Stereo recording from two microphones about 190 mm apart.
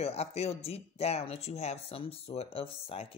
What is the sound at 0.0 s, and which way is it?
Speech, 35° left (ahead or behind).